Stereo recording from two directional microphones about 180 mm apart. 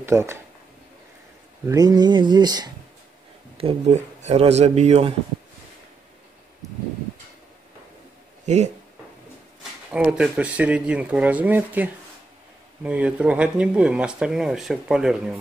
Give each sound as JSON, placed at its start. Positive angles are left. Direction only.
{"t": 0.0, "sound": "speech", "side_deg": -15}
{"t": 1.7, "sound": "a sound", "side_deg": -20}
{"t": 3.5, "sound": "speech", "side_deg": -35}
{"t": 9.6, "sound": "speech", "side_deg": -5}